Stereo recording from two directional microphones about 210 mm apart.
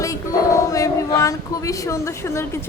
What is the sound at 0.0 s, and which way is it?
A woman's voice, 15° left (ahead or behind).